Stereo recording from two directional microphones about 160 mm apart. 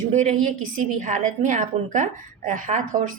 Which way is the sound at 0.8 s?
55° right (ahead or behind).